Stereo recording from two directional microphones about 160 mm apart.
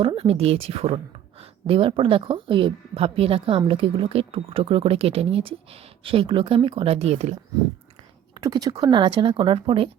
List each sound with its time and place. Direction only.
0.0 s speech: 35° right (ahead or behind)
8.4 s speech: 25° right (ahead or behind)